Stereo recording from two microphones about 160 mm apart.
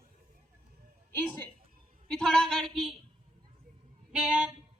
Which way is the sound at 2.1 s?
5° left (ahead or behind).